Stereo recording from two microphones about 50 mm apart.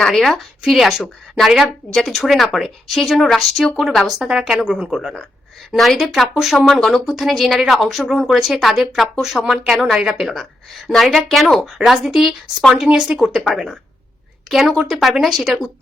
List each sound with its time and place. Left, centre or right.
0.0 s a woman's voice: centre
1.9 s speech: centre
4.0 s a woman's voice: centre
5.7 s speech: centre
6.9 s speech: centre
11.4 s a woman's voice: centre
12.0 s a woman's voice: centre